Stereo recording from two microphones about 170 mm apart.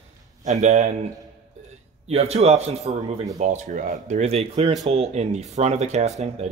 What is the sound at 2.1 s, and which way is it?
Speech, 40° right (ahead or behind).